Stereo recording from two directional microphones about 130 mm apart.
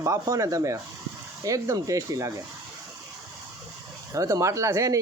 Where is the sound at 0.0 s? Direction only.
25° right (ahead or behind).